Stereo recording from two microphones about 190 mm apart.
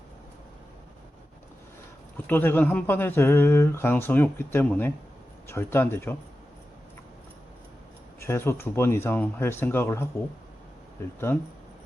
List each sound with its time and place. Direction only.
2.1 s speech: 10° left (ahead or behind)
8.2 s speech: 15° left (ahead or behind)
11.3 s speech: 10° left (ahead or behind)